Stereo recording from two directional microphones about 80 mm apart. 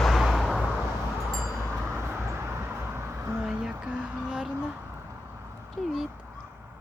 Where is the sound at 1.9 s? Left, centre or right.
Right.